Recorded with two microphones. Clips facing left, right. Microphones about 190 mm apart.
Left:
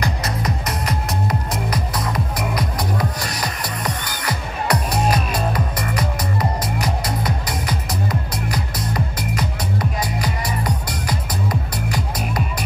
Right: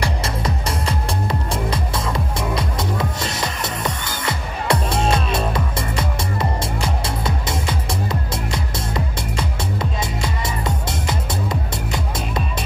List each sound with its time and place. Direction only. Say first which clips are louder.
0.0 s music: even; 30° right (ahead or behind)